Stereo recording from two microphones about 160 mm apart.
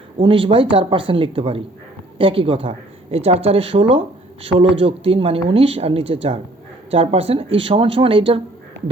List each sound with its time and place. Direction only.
0.2 s speech: 30° right (ahead or behind)